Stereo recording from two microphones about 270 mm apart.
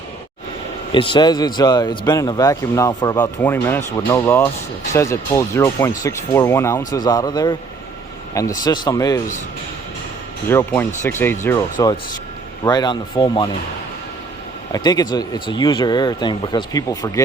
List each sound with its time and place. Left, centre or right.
0.9 s speech: centre
10.5 s speech: centre
14.7 s speech: centre